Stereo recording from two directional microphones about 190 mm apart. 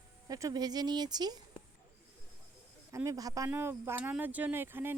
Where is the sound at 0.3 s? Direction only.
15° right (ahead or behind).